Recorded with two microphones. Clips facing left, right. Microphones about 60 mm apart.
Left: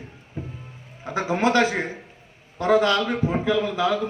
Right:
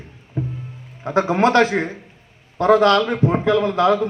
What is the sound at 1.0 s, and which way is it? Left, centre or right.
A man's voice, right.